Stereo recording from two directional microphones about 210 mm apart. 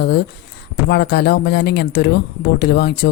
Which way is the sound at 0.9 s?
50° left (ahead or behind).